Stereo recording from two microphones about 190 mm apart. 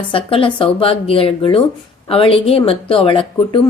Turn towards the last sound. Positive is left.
turn(degrees=25)  # may be behind; listen again after turning